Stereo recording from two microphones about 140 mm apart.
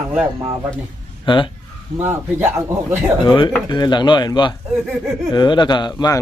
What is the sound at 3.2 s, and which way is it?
Speech, 35° left (ahead or behind).